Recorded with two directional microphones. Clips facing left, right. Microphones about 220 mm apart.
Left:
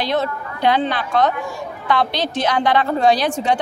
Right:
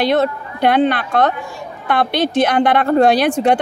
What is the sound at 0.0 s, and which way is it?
A woman's voice, 60° right (ahead or behind).